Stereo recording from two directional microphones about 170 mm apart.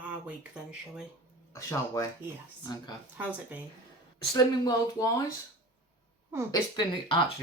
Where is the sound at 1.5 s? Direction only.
20° left (ahead or behind).